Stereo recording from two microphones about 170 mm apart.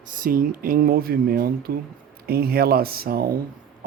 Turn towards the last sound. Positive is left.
turn(degrees=-60)  # may be behind; listen again after turning